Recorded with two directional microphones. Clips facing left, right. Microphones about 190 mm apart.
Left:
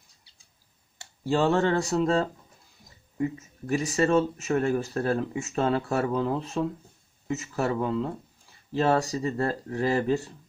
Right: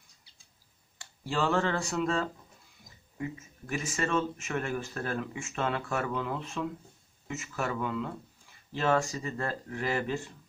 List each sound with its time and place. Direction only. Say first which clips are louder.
1.2 s speech: left 6 dB; 35° left (ahead or behind)